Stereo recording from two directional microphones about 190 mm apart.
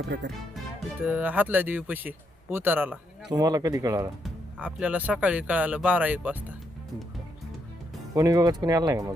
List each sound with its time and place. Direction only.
0.1 s speech: 60° right (ahead or behind)
1.0 s speech: 10° right (ahead or behind)
4.2 s speech: 5° right (ahead or behind)
8.1 s speech: 20° right (ahead or behind)